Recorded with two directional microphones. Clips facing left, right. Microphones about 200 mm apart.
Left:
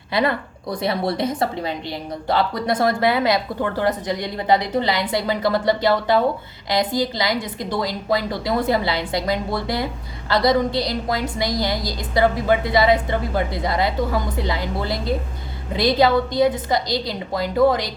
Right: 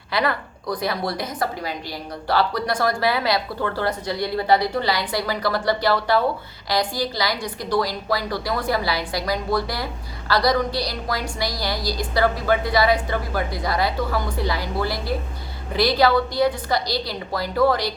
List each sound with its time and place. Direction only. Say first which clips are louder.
0.1 s a woman's voice: left 3 dB; 20° left (ahead or behind)